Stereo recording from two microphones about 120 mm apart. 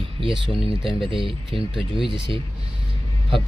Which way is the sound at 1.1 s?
45° right (ahead or behind).